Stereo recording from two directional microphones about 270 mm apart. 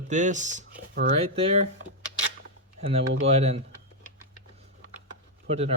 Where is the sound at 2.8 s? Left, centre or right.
Right.